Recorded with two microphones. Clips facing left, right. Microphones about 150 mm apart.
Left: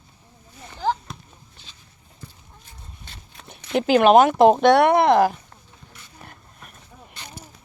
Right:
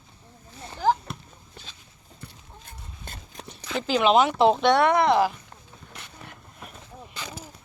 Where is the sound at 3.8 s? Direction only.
55° left (ahead or behind).